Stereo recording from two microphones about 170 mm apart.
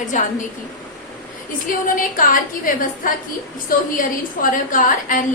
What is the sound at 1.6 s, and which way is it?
A woman's voice, 50° left (ahead or behind).